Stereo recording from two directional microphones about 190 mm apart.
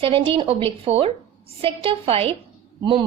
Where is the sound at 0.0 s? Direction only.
30° right (ahead or behind).